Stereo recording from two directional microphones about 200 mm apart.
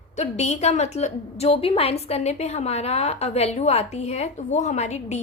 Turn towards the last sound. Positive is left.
turn(degrees=35)  # may be behind; listen again after turning